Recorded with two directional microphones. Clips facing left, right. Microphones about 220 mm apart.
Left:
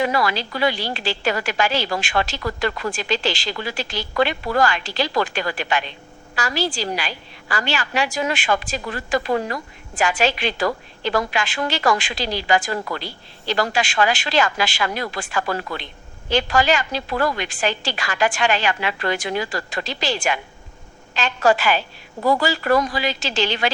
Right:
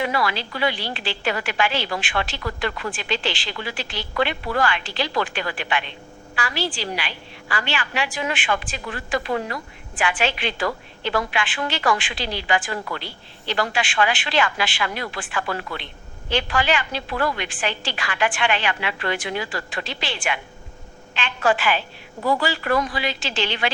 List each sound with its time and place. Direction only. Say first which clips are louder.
0.0 s a woman's voice: left 3 dB; 40° left (ahead or behind)